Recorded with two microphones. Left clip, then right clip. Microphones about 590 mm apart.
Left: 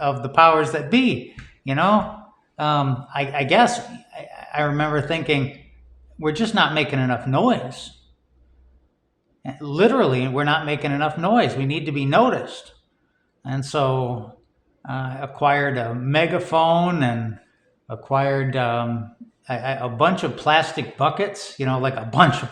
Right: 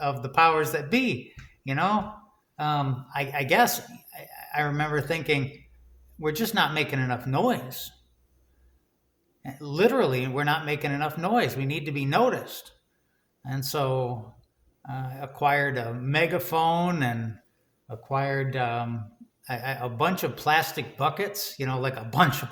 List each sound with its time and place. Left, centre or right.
0.0 s speech: right
9.4 s speech: right